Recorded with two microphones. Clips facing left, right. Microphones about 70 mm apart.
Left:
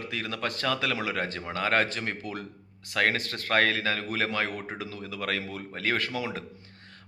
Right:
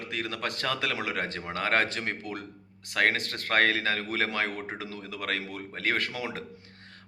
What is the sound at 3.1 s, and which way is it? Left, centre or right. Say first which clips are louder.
A man's voice: left 1 dB; right.